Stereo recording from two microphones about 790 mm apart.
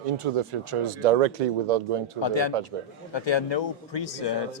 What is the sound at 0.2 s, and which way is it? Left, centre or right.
Speech, right.